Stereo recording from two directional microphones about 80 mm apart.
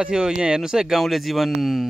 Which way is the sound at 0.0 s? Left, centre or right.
Centre.